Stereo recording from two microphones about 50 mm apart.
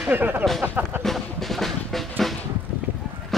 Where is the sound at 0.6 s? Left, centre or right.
Right.